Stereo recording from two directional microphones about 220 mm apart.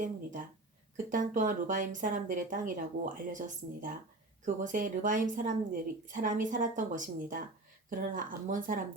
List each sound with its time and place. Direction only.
0.0 s a woman's voice: 35° right (ahead or behind)